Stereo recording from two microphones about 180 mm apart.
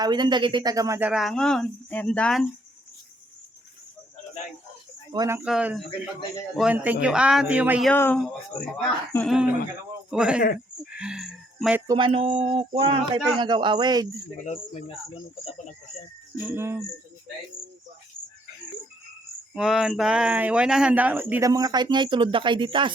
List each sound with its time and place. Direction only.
0.0 s speech: 25° right (ahead or behind); by 2.5 s 5° left (ahead or behind)
5.1 s speech: 20° right (ahead or behind)
5.4 s speech: 5° right (ahead or behind)
7.9 s speech: 10° left (ahead or behind)
11.9 s speech: 30° right (ahead or behind)
14.4 s speech: 40° left (ahead or behind)
16.4 s speech: 10° right (ahead or behind)
19.5 s speech: 5° right (ahead or behind); by 22.9 s 25° right (ahead or behind)